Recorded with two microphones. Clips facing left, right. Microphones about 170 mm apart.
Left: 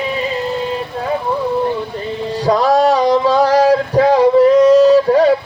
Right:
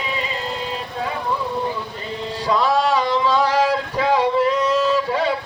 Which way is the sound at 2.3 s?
45° left (ahead or behind).